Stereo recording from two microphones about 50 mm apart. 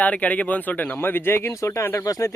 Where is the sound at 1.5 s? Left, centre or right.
Left.